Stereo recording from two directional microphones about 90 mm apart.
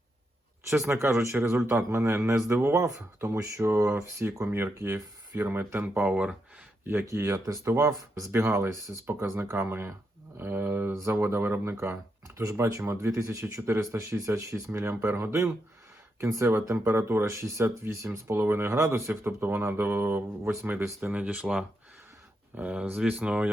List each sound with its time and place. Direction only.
0.7 s a man's voice: 30° right (ahead or behind)
5.8 s speech: 15° right (ahead or behind)
7.0 s a man's voice: 35° right (ahead or behind)
20.7 s speech: 25° right (ahead or behind)